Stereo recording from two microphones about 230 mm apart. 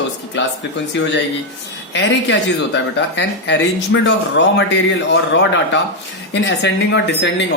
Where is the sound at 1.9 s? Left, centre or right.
Left.